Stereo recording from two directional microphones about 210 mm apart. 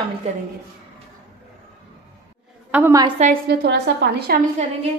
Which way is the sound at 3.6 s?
55° right (ahead or behind).